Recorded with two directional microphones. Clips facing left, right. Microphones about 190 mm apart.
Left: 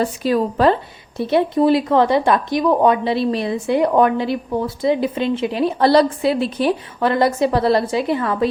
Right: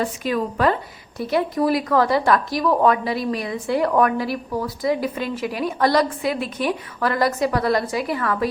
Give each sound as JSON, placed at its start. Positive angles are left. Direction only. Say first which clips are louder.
{"t": 0.0, "sound": "a woman's voice", "louder": "left 5 dB", "side_deg": 35}